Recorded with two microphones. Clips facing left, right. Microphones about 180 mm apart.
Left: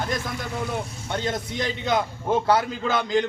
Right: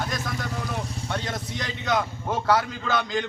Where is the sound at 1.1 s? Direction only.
25° left (ahead or behind).